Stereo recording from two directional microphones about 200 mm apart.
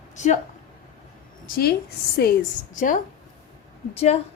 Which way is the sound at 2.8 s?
40° left (ahead or behind).